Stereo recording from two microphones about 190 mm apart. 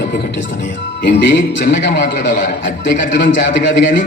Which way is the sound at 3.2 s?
45° left (ahead or behind).